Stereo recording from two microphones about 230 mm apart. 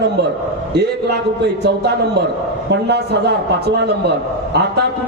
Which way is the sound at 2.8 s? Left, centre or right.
Right.